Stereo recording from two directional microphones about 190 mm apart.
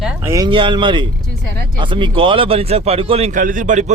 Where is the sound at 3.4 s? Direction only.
45° right (ahead or behind).